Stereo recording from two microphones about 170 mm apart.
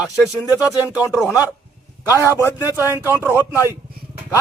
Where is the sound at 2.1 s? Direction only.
15° left (ahead or behind).